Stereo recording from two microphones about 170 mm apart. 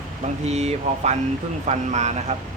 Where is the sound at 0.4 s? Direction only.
40° right (ahead or behind).